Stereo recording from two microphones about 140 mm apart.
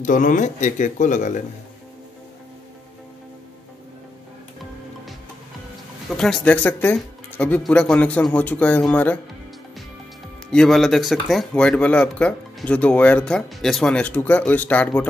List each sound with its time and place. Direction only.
0.0 s speech: 65° left (ahead or behind)
6.0 s speech: 5° left (ahead or behind)
10.5 s speech: 5° left (ahead or behind)